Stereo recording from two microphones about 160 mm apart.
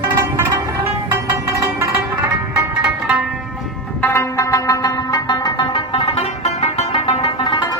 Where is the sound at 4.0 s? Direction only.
15° left (ahead or behind); by 7.7 s 30° left (ahead or behind).